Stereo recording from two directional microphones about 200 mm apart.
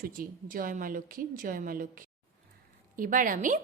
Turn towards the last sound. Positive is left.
turn(degrees=-40)  # may be behind; listen again after turning